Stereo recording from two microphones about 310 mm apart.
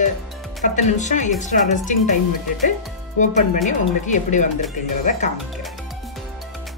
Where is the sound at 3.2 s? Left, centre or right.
Left.